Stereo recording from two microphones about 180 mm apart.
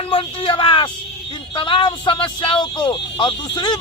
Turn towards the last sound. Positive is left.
turn(degrees=25)  # may be behind; listen again after turning